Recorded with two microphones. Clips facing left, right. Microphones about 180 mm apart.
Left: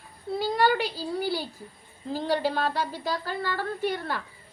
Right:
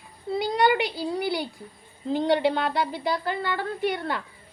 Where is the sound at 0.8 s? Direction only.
65° right (ahead or behind).